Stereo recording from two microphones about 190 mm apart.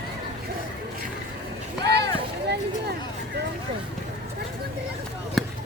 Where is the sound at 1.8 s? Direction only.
60° right (ahead or behind).